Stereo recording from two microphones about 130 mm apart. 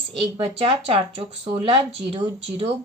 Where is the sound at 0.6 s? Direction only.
45° right (ahead or behind).